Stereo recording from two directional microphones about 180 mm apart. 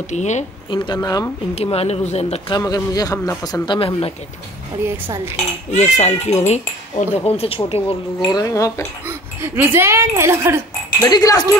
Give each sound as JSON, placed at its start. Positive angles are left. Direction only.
{"t": 0.1, "sound": "speech", "side_deg": 40}
{"t": 0.7, "sound": "speech", "side_deg": 20}
{"t": 1.5, "sound": "speech", "side_deg": 35}
{"t": 3.7, "sound": "speech", "side_deg": 30}
{"t": 4.8, "sound": "speech", "side_deg": -15}
{"t": 5.3, "sound": "speech", "side_deg": 40}
{"t": 8.3, "sound": "speech", "side_deg": 20}
{"t": 9.0, "sound": "speech", "side_deg": -15}
{"t": 11.0, "sound": "speech", "side_deg": 20}